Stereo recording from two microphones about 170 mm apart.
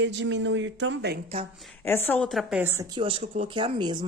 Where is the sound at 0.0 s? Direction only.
90° right.